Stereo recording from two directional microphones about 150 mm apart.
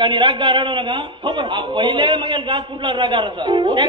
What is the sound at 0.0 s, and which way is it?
A man's voice, 30° right (ahead or behind).